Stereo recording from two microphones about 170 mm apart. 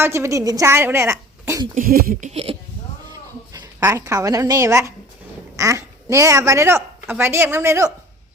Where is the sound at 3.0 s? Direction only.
25° right (ahead or behind).